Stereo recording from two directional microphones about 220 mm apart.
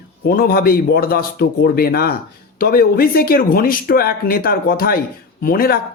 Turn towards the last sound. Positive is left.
turn(degrees=40)  # may be behind; listen again after turning